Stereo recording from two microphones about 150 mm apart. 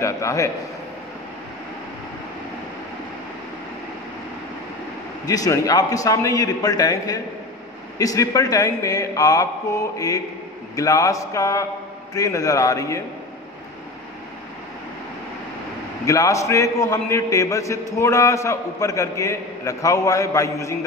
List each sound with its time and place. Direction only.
0.0 s a man's voice: 20° left (ahead or behind)
5.2 s a man's voice: 25° left (ahead or behind)
16.1 s a man's voice: 20° left (ahead or behind)